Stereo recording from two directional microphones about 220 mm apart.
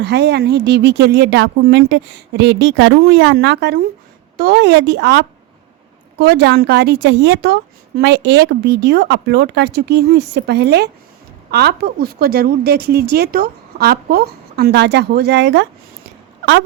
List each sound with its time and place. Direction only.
0.0 s a woman's voice: 50° right (ahead or behind)